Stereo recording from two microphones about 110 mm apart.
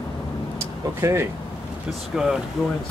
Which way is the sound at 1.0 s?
25° right (ahead or behind).